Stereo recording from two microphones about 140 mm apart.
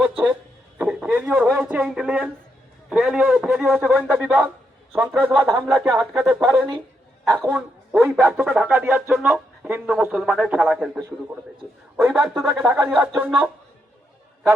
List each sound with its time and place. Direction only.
0.8 s a man's voice: 5° right (ahead or behind)
12.5 s a man's voice: 15° right (ahead or behind)